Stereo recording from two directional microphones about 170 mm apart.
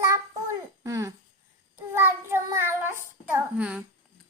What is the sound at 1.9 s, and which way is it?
A child's voice, 15° right (ahead or behind).